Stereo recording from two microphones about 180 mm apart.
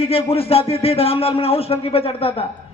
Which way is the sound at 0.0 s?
30° left (ahead or behind).